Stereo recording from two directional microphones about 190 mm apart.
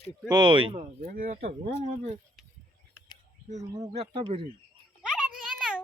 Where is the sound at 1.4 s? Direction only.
30° right (ahead or behind).